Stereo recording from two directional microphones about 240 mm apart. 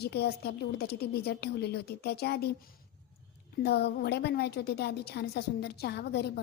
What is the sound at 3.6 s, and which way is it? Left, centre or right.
A woman's voice, left.